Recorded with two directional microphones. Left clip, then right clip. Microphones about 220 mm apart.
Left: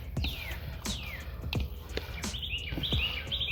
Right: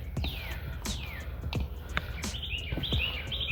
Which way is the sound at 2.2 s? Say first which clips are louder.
Even; centre (ahead or behind).